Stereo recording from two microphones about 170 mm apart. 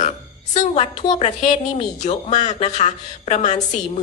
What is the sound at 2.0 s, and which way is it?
A woman's voice, 45° left (ahead or behind).